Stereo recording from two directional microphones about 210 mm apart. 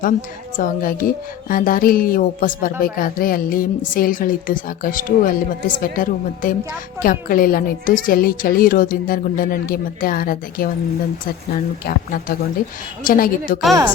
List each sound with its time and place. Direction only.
0.5 s a woman's voice: 40° left (ahead or behind)